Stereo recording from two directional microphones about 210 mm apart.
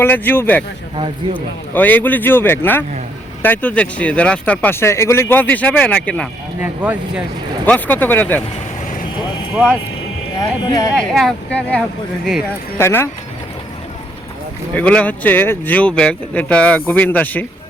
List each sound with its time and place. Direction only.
0.0 s speech: 10° left (ahead or behind)
1.7 s speech: 10° left (ahead or behind)
7.6 s speech: 10° left (ahead or behind)
10.3 s speech: 15° left (ahead or behind)
10.9 s speech: centre (ahead or behind)
14.8 s speech: 5° left (ahead or behind)